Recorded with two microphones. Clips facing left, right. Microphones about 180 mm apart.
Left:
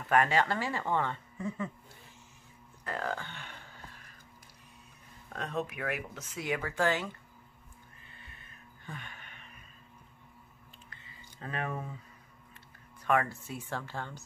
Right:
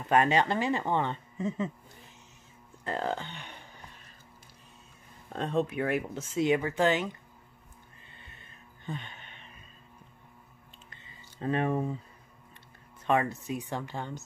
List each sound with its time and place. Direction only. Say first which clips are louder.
0.0 s speech: right 3 dB; 20° right (ahead or behind)
2.8 s burping: right 4 dB; 25° right (ahead or behind)
5.3 s speech: right 6 dB; 30° right (ahead or behind)
8.8 s music: right 6 dB; 25° right (ahead or behind)
10.9 s a sound: right 1 dB; 25° right (ahead or behind)
13.0 s speech: right 2 dB; 20° right (ahead or behind)